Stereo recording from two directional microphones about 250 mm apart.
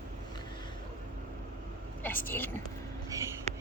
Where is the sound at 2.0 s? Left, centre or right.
Centre.